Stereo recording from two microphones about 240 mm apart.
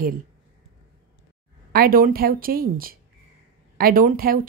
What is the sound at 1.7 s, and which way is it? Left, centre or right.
Speech, right.